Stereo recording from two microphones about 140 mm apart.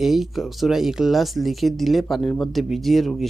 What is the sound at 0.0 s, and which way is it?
Speech, centre (ahead or behind).